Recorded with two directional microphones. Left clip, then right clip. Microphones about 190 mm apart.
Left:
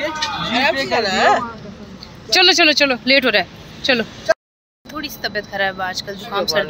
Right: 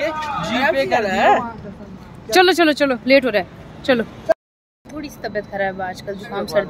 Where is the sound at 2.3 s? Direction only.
20° right (ahead or behind).